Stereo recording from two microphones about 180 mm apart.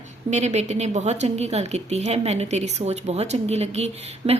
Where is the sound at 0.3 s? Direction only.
40° right (ahead or behind).